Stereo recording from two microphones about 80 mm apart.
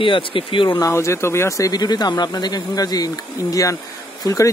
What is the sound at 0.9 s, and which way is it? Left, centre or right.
Speech, left.